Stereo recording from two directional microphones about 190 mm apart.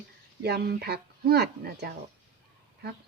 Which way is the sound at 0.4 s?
55° right (ahead or behind).